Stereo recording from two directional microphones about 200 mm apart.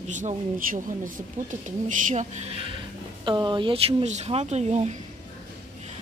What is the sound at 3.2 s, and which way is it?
Speech, 25° right (ahead or behind).